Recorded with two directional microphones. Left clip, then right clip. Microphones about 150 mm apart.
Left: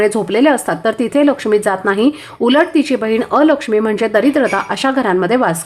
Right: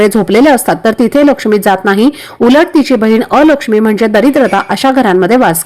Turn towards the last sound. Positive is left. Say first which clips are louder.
# right 6 dB
turn(degrees=-30)  # may be behind; listen again after turning